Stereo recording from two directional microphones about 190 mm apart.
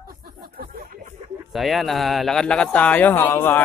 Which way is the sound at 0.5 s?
50° right (ahead or behind).